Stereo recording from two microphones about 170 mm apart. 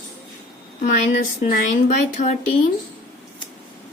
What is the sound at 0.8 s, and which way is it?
Speech, 45° left (ahead or behind).